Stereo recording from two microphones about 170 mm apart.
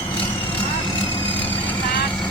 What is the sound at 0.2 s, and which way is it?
Vehicle, 30° left (ahead or behind).